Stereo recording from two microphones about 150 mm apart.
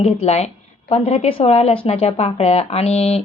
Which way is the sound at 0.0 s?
45° left (ahead or behind).